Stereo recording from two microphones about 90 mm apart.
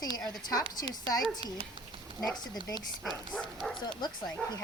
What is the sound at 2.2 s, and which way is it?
Speech, 50° left (ahead or behind).